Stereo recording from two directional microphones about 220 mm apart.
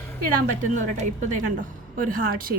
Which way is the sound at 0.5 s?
35° right (ahead or behind).